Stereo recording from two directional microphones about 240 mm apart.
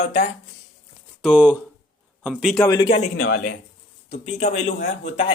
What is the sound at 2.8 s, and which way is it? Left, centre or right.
Speech, left.